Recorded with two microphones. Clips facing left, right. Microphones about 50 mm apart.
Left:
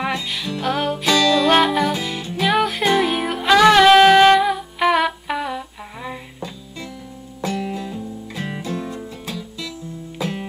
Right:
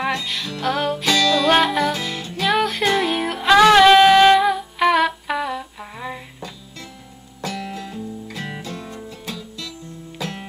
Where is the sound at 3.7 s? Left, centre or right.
Centre.